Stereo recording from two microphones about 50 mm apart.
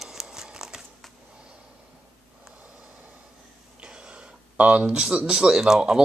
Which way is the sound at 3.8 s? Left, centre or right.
Centre.